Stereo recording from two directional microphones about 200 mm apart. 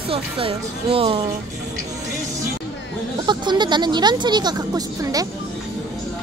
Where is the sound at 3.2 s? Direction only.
20° right (ahead or behind).